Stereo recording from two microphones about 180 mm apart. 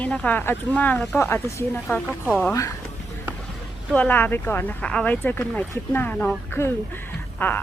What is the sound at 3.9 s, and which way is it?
Speech, 10° left (ahead or behind).